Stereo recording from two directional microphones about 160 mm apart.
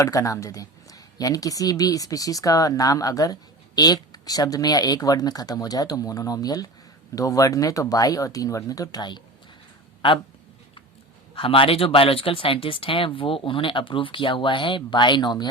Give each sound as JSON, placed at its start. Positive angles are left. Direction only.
{"t": 0.0, "sound": "speech", "side_deg": 20}
{"t": 11.3, "sound": "speech", "side_deg": 35}